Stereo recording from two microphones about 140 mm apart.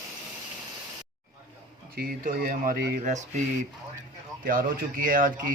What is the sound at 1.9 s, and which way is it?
Speech, 90° right.